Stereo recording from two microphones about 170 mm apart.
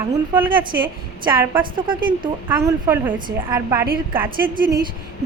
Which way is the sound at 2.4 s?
15° right (ahead or behind).